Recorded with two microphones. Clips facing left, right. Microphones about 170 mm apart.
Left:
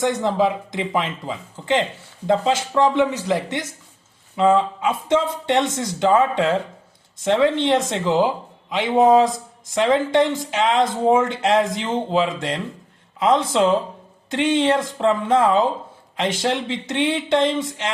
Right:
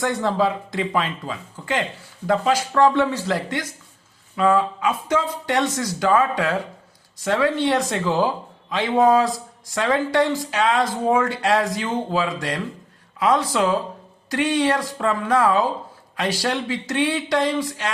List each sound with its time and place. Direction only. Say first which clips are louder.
0.0 s speech: left 2 dB; 20° left (ahead or behind)